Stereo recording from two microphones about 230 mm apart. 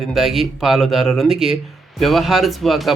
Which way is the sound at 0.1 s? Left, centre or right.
Centre.